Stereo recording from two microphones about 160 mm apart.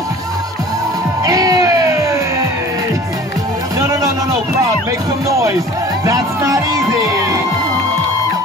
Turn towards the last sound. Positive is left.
turn(degrees=-20)  # may be behind; listen again after turning